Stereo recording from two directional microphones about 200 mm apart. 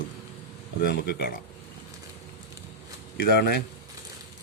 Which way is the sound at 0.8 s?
50° left (ahead or behind).